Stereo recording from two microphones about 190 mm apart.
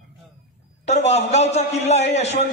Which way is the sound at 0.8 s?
35° left (ahead or behind).